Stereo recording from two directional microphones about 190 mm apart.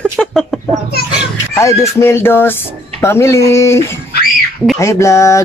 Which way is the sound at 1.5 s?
15° left (ahead or behind).